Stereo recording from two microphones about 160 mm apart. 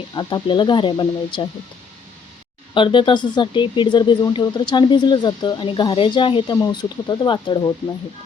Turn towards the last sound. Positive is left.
turn(degrees=30)  # may be behind; listen again after turning